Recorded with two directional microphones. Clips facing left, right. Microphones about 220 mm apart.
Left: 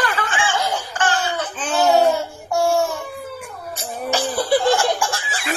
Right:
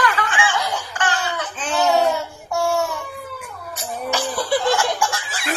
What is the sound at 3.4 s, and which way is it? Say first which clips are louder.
Giggle: left 1 dB; 35° left (ahead or behind).